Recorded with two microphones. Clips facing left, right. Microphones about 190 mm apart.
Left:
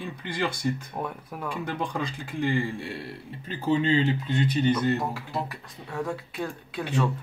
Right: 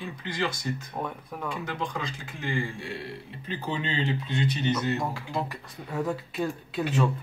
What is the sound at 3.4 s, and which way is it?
Speech, 45° left (ahead or behind).